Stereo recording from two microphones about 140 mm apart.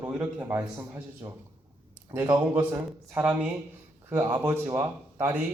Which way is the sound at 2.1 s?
20° right (ahead or behind).